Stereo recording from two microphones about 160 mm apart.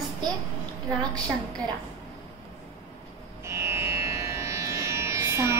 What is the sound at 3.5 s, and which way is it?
Music, 15° right (ahead or behind).